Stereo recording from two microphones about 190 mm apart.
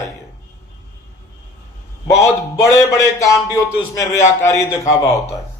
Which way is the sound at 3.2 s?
15° left (ahead or behind).